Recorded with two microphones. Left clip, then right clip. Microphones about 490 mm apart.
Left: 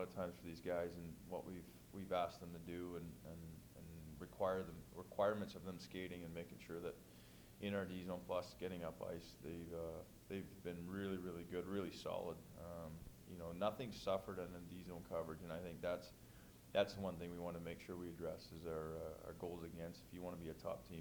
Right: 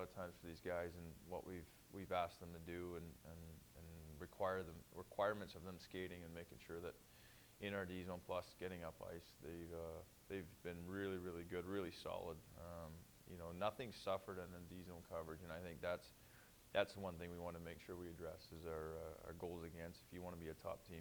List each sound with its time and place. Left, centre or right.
0.0 s a sound: right
1.3 s speech: right
4.2 s speech: right